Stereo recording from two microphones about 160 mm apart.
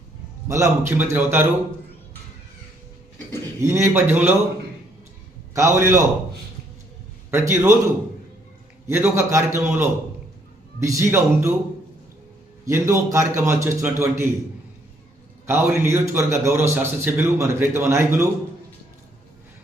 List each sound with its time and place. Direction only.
0.4 s a man's voice: 20° right (ahead or behind)
3.6 s a man's voice: 20° right (ahead or behind)
5.5 s a man's voice: 15° right (ahead or behind)
7.3 s a man's voice: 15° right (ahead or behind)
8.9 s a man's voice: 15° right (ahead or behind)
12.6 s a man's voice: 15° right (ahead or behind)
15.4 s a man's voice: 15° right (ahead or behind)